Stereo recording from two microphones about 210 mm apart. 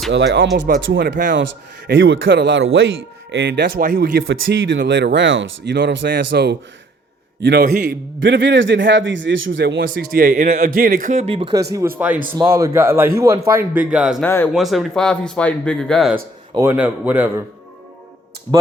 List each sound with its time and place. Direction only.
0.1 s a man's voice: 60° right (ahead or behind)
3.4 s speech: 45° right (ahead or behind)
4.2 s a man's voice: 65° right (ahead or behind)
5.7 s speech: 50° right (ahead or behind)
7.9 s a man's voice: 60° right (ahead or behind)
9.8 s speech: 45° right (ahead or behind); by 11.4 s 30° right (ahead or behind)
11.7 s speech: 10° right (ahead or behind)
14.3 s speech: 10° left (ahead or behind)
14.5 s speech: centre (ahead or behind)
16.6 s speech: 10° right (ahead or behind)